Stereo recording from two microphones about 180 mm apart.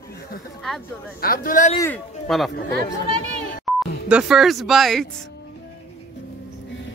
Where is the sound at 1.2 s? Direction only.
55° left (ahead or behind).